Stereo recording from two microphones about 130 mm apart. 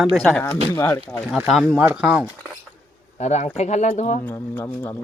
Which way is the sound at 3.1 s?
60° left (ahead or behind).